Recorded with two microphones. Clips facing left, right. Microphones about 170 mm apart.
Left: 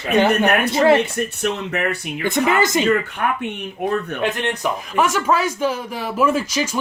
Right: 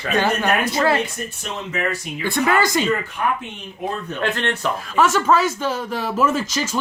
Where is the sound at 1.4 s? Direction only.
65° left (ahead or behind).